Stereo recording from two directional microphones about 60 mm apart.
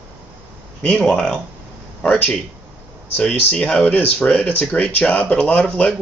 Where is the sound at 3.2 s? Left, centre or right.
Left.